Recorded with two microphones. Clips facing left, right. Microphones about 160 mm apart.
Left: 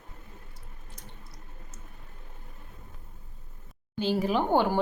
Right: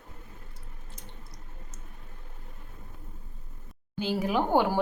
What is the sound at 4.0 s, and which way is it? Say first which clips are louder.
Speech: left 1 dB; 10° right (ahead or behind).